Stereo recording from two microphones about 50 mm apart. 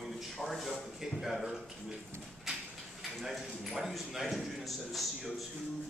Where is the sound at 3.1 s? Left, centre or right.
Centre.